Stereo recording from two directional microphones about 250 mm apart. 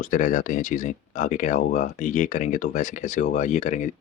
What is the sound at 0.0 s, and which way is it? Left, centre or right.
Speech, left.